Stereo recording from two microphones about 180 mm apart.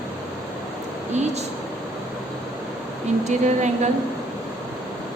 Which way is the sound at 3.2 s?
40° right (ahead or behind).